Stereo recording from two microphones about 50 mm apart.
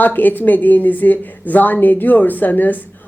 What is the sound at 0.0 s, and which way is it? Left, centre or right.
Speech, left.